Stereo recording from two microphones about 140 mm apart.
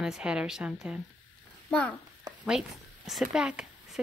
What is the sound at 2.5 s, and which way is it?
Speech, 5° right (ahead or behind).